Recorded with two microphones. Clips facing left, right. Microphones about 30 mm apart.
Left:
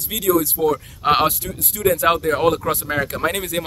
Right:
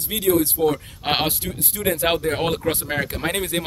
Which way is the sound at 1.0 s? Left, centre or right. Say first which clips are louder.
Left 5 dB; right.